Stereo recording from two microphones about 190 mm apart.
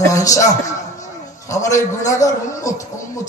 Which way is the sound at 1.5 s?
15° left (ahead or behind).